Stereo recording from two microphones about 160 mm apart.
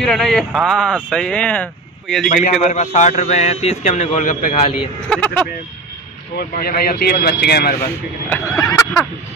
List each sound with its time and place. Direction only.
0.0 s speech: centre (ahead or behind)
2.2 s a man's voice: 50° left (ahead or behind)
5.1 s speech: 10° left (ahead or behind)
6.3 s speech: 65° left (ahead or behind)
8.3 s a sound: 20° left (ahead or behind)